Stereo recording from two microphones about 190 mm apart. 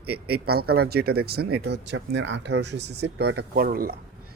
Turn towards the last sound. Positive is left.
turn(degrees=-50)  # may be behind; listen again after turning